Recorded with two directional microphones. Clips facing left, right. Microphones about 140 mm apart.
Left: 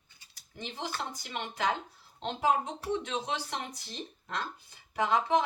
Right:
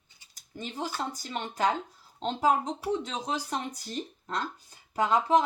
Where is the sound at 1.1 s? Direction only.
35° right (ahead or behind).